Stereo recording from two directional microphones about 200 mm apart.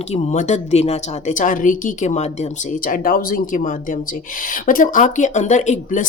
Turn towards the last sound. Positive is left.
turn(degrees=35)  # may be behind; listen again after turning